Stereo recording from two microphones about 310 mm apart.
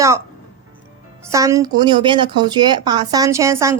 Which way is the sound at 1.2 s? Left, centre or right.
Centre.